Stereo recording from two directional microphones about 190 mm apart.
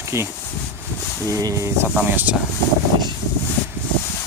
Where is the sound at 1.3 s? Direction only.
15° right (ahead or behind).